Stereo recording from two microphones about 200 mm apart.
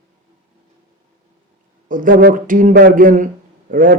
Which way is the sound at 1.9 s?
40° right (ahead or behind).